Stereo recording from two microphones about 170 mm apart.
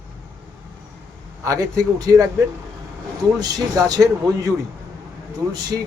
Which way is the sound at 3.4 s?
20° right (ahead or behind).